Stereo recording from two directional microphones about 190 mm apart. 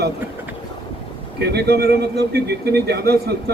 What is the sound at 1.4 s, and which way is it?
Speech, 60° right (ahead or behind).